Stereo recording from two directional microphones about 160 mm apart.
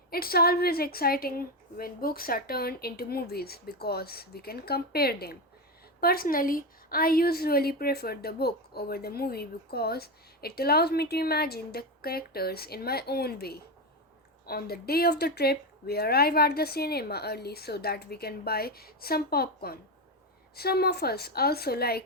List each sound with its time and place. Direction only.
0.1 s a woman's voice: 70° left (ahead or behind)